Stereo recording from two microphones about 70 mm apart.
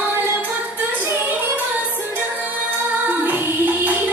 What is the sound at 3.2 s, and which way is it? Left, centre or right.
Music, right.